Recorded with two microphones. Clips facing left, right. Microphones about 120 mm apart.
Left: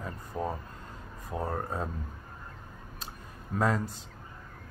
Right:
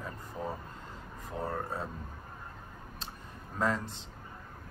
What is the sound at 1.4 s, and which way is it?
Speech, 15° left (ahead or behind).